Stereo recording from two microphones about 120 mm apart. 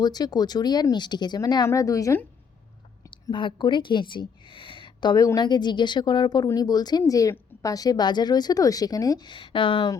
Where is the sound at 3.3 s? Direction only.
40° left (ahead or behind).